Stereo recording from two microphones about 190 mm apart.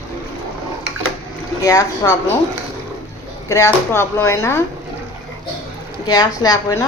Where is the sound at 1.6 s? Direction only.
20° left (ahead or behind).